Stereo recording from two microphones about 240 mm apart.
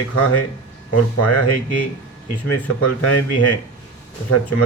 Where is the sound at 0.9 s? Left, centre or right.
Left.